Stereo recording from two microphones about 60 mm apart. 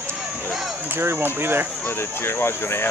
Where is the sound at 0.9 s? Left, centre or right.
Right.